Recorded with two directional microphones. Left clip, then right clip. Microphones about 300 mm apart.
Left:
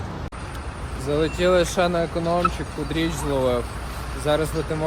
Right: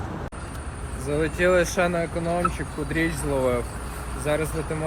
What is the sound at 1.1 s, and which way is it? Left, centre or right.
Speech, centre.